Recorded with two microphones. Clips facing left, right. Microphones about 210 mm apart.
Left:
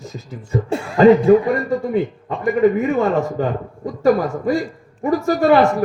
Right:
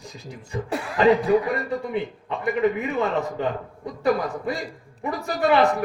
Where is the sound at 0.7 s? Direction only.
25° left (ahead or behind).